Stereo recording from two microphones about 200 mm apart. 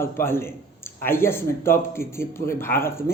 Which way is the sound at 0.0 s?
10° left (ahead or behind).